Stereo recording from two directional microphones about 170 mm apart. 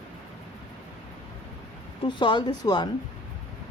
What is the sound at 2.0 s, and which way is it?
Speech, 30° left (ahead or behind).